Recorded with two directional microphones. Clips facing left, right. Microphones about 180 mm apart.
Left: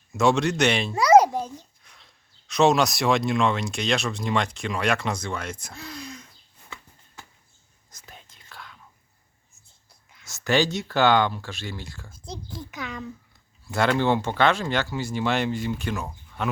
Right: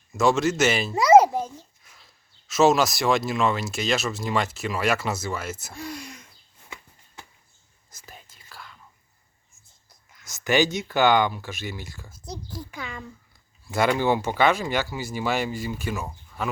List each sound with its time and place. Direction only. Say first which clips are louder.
0.1 s a child's voice: even; centre (ahead or behind)
7.9 s whispering: right 1 dB; 5° right (ahead or behind)
10.2 s a sound: right 1 dB; centre (ahead or behind)
10.7 s speech: even; centre (ahead or behind)
12.1 s a child's voice: right 1 dB; 25° left (ahead or behind)
12.8 s speech: left 3 dB; centre (ahead or behind)